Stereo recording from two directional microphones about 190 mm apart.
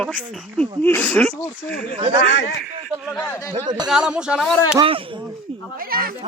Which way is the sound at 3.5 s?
20° right (ahead or behind).